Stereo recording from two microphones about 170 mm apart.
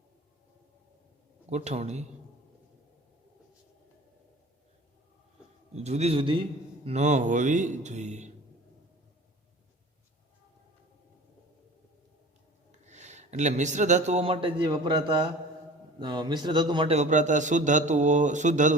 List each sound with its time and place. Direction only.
1.5 s a man's voice: 40° right (ahead or behind)
5.7 s a man's voice: 40° right (ahead or behind)
6.8 s a man's voice: 40° right (ahead or behind)
12.8 s a man's voice: 45° right (ahead or behind)